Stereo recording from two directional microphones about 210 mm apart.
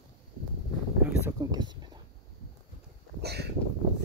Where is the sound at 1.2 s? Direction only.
15° right (ahead or behind).